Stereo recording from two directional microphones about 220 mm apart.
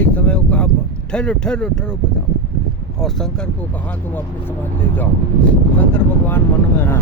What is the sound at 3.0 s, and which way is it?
Speech, centre (ahead or behind).